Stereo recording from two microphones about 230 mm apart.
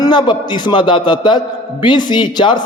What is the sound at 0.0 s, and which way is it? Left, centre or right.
A man's voice, centre.